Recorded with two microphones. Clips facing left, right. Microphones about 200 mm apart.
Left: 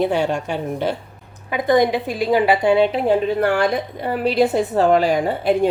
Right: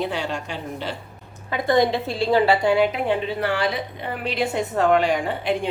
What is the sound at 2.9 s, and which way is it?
A woman's voice, 40° left (ahead or behind).